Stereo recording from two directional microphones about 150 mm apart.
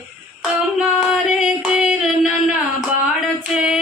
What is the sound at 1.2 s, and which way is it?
Music, 5° right (ahead or behind).